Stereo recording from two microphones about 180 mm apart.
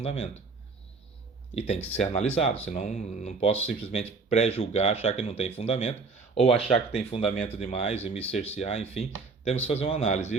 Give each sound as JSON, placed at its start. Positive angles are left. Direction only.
{"t": 0.0, "sound": "speech", "side_deg": 35}
{"t": 1.5, "sound": "speech", "side_deg": 35}